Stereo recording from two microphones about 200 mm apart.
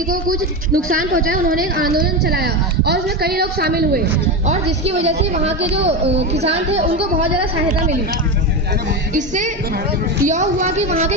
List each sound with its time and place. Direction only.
0.1 s a woman's voice: 45° right (ahead or behind)
4.4 s a woman's voice: 30° right (ahead or behind)
9.1 s a woman's voice: 40° right (ahead or behind)